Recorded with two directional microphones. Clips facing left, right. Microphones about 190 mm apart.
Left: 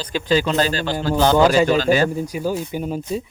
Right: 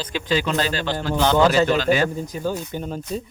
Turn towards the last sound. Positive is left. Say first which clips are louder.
# left 4 dB
turn(degrees=10)  # may be behind; listen again after turning